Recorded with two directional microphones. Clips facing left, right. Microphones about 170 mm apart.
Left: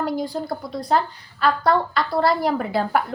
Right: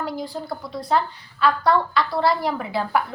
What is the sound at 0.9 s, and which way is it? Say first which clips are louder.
A woman's voice: left 1 dB; 40° left (ahead or behind).